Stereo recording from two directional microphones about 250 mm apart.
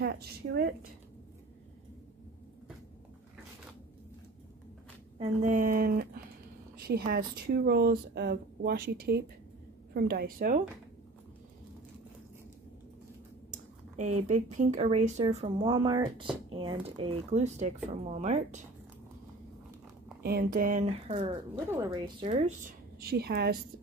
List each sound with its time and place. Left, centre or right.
0.0 s speech: right
5.2 s speech: right
7.1 s speech: right
13.5 s speech: right
20.2 s speech: right
21.7 s speech: centre
22.3 s speech: right